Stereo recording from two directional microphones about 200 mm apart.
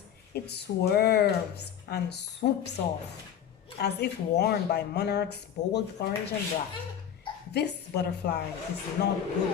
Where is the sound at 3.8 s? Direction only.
55° left (ahead or behind).